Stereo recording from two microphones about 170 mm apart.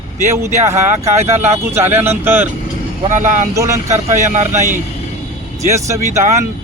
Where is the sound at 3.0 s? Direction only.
45° right (ahead or behind).